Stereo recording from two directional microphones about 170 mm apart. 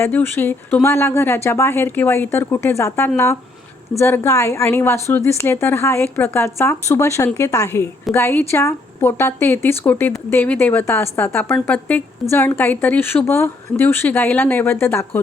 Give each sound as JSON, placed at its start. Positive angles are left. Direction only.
{"t": 0.0, "sound": "a woman's voice", "side_deg": 10}